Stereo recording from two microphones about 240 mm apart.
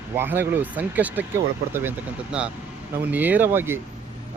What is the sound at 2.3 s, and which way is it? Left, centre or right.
Speech, centre.